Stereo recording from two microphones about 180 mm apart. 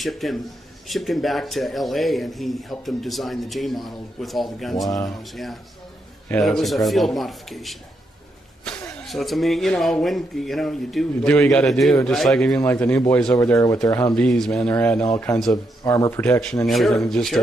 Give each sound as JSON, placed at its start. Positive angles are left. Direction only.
{"t": 0.0, "sound": "speech", "side_deg": 0}
{"t": 9.0, "sound": "speech", "side_deg": 0}
{"t": 14.1, "sound": "speech", "side_deg": 5}
{"t": 16.1, "sound": "speech", "side_deg": 10}